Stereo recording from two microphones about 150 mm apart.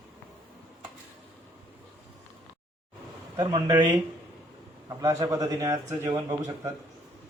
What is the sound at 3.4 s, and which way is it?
A man's voice, 30° right (ahead or behind).